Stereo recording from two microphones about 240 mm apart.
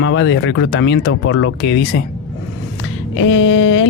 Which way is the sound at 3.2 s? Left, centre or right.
Left.